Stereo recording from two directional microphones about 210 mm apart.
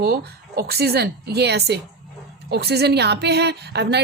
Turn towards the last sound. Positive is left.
turn(degrees=-50)  # may be behind; listen again after turning